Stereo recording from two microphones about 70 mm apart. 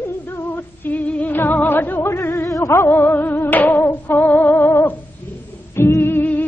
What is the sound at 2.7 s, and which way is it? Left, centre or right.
Music, left.